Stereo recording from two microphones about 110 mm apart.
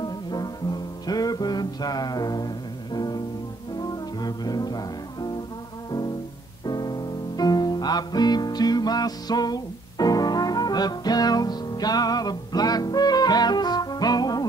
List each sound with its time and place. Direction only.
0.0 s music: 40° left (ahead or behind)
6.6 s music: 40° left (ahead or behind)